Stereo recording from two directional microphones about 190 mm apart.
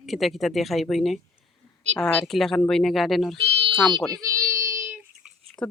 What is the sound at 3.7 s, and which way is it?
Speech, centre (ahead or behind).